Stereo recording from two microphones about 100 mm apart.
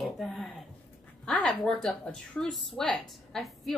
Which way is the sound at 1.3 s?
5° left (ahead or behind).